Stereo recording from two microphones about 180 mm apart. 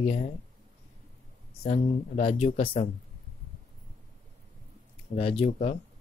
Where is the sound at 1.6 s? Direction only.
40° left (ahead or behind).